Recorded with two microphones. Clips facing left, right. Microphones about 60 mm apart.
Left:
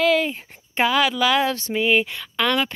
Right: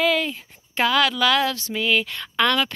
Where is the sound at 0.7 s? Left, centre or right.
Centre.